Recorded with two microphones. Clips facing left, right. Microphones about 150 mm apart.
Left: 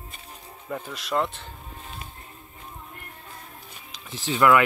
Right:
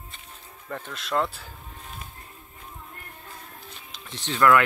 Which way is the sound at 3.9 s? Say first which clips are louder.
Left 4 dB; 5° left (ahead or behind).